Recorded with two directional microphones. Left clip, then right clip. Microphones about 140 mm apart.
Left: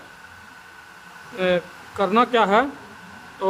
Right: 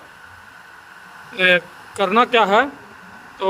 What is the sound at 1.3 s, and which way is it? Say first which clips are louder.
Speech: right 6 dB; 85° right.